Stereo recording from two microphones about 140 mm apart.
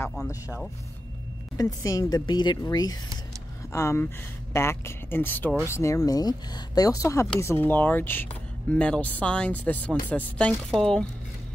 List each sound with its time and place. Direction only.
1.6 s speech: 25° left (ahead or behind); by 11.1 s 5° left (ahead or behind)